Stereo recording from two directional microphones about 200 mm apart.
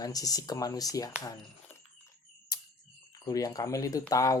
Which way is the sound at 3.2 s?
15° left (ahead or behind).